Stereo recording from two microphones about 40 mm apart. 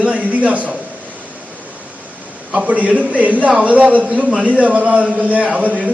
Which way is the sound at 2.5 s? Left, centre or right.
Right.